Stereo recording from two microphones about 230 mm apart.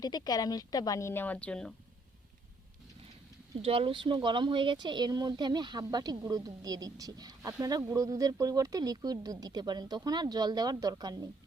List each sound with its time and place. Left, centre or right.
0.0 s a woman's voice: centre
3.6 s speech: right